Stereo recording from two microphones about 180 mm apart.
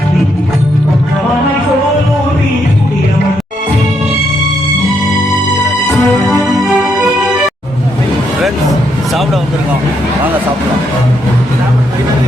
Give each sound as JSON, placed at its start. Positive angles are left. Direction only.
{"t": 5.9, "sound": "music", "side_deg": 20}
{"t": 6.4, "sound": "music", "side_deg": 0}